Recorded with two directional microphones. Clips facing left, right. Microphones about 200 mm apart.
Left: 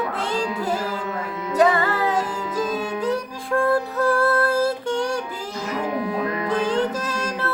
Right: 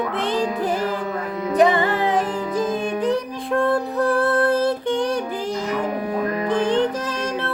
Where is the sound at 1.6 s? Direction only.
20° right (ahead or behind).